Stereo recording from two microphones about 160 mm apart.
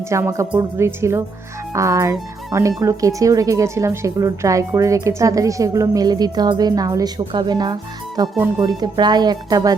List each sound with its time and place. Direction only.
0.1 s a woman's voice: 20° right (ahead or behind)